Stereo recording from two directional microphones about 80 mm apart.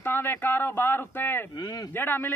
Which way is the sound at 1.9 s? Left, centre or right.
Left.